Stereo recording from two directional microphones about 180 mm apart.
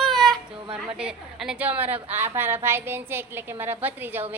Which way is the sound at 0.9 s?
5° right (ahead or behind).